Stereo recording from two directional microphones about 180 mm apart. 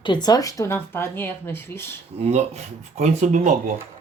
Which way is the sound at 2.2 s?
35° right (ahead or behind).